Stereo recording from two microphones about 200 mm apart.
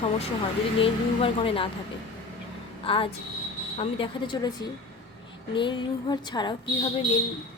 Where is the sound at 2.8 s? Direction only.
25° left (ahead or behind).